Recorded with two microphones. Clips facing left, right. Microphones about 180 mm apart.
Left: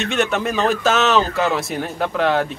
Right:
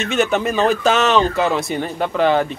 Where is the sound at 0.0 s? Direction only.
Centre (ahead or behind).